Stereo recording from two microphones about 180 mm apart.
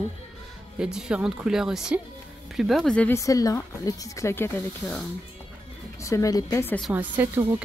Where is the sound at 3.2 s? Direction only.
20° left (ahead or behind).